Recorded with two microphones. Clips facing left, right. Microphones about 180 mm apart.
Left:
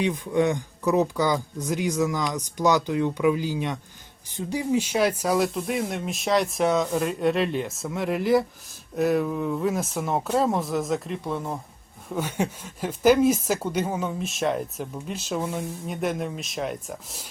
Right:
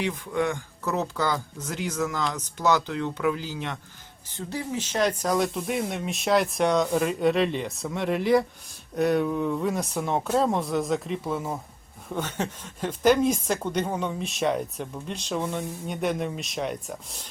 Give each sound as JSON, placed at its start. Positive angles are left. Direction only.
{"t": 0.0, "sound": "a woman's voice", "side_deg": 20}